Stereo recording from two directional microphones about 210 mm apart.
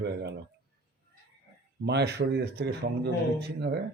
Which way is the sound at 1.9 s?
50° right (ahead or behind).